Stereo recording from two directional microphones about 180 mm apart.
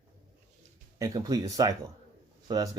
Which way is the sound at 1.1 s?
20° right (ahead or behind).